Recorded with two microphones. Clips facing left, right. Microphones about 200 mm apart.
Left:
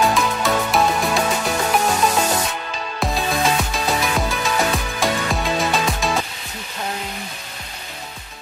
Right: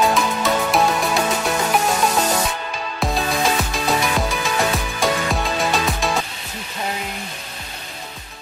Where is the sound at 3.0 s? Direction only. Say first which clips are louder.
Even; centre (ahead or behind).